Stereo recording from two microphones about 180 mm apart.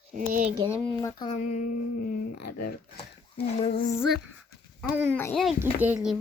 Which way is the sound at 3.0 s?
35° left (ahead or behind).